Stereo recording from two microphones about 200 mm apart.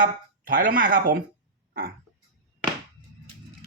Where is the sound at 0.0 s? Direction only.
45° right (ahead or behind).